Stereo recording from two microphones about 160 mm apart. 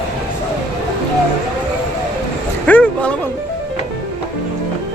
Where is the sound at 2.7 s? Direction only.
10° left (ahead or behind).